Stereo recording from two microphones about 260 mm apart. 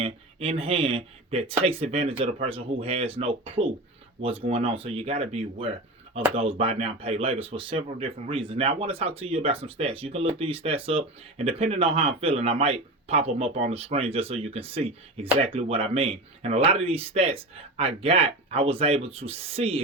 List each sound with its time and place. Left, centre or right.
0.0 s speech: right